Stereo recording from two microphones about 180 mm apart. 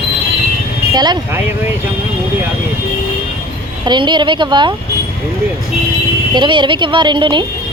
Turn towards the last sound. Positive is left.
turn(degrees=-25)  # may be behind; listen again after turning